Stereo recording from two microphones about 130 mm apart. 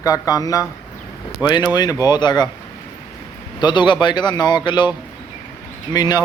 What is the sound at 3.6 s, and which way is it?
A man's voice, 35° left (ahead or behind).